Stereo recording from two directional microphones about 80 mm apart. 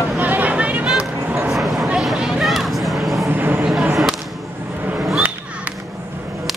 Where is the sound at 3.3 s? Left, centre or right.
Right.